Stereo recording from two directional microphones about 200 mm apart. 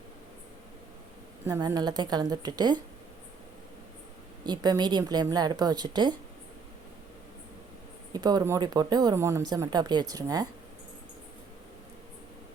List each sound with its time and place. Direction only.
1.5 s speech: 20° right (ahead or behind)
4.4 s speech: 20° right (ahead or behind)
8.1 s speech: 20° right (ahead or behind)